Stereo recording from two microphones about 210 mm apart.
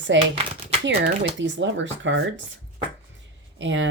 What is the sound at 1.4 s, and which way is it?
Speech, 60° right (ahead or behind).